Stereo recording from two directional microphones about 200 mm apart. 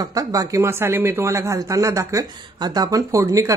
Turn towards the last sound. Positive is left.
turn(degrees=-15)  # may be behind; listen again after turning